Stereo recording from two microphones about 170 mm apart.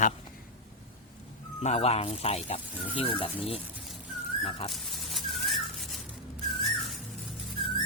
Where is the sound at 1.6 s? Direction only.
40° left (ahead or behind).